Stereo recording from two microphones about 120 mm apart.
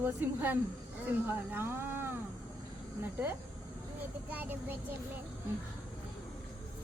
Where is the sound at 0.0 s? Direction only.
15° right (ahead or behind).